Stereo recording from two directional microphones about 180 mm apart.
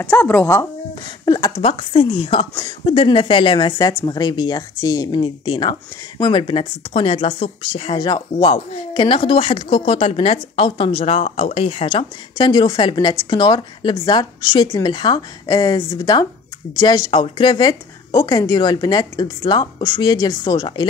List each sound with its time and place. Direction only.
0.0 s a woman's voice: 5° left (ahead or behind)